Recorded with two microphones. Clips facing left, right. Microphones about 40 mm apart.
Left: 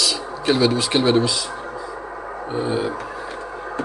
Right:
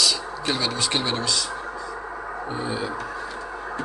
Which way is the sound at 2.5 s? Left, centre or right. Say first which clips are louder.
Left 7 dB; centre.